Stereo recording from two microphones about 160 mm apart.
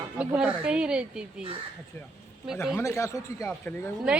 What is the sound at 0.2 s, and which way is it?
Speech, 5° right (ahead or behind).